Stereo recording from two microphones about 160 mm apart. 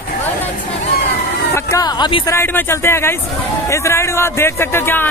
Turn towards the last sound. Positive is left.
turn(degrees=15)  # may be behind; listen again after turning